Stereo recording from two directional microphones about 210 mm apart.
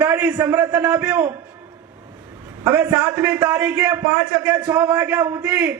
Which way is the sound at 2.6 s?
10° right (ahead or behind).